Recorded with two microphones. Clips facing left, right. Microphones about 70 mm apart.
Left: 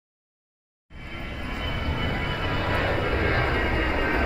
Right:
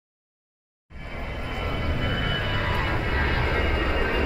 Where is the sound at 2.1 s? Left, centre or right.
Left.